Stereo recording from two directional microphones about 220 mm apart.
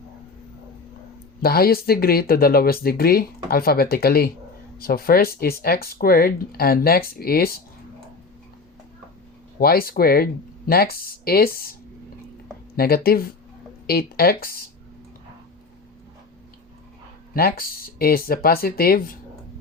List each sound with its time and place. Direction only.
1.4 s speech: 45° left (ahead or behind)
9.6 s speech: 45° left (ahead or behind)
12.7 s speech: 45° left (ahead or behind)
17.3 s speech: 45° left (ahead or behind)